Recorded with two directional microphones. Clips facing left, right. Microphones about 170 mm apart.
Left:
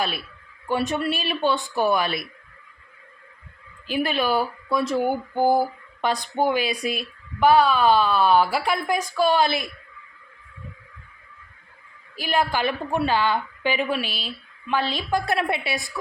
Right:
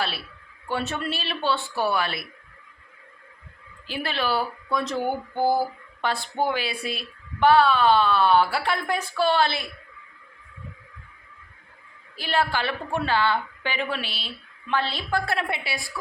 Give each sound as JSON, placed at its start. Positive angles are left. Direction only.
{"t": 0.7, "sound": "speech", "side_deg": 15}
{"t": 3.8, "sound": "speech", "side_deg": 15}
{"t": 12.1, "sound": "a woman's voice", "side_deg": 15}